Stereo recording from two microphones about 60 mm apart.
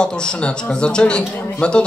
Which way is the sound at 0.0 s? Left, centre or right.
Centre.